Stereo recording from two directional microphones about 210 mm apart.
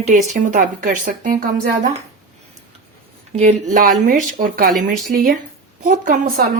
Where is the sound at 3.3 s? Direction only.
35° right (ahead or behind).